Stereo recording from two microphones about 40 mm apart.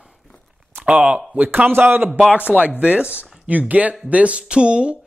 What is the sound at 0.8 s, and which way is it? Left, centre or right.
Speech, right.